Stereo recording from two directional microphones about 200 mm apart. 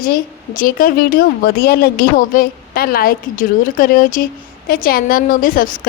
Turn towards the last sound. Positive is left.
turn(degrees=45)  # may be behind; listen again after turning